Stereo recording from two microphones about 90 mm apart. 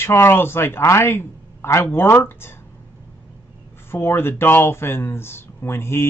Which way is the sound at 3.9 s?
25° left (ahead or behind).